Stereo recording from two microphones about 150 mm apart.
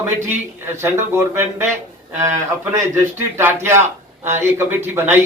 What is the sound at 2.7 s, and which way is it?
A man's voice, 15° right (ahead or behind).